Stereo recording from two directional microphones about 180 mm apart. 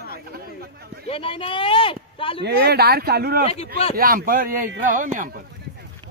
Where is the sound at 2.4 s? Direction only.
60° right (ahead or behind); by 5.3 s 45° right (ahead or behind).